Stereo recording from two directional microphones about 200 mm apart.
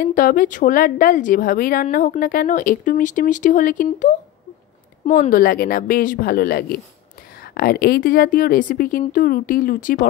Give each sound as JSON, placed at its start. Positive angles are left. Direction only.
{"t": 0.0, "sound": "speech", "side_deg": 45}